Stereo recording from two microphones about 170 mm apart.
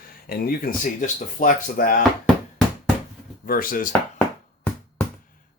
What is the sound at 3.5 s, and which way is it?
Speech, 55° left (ahead or behind).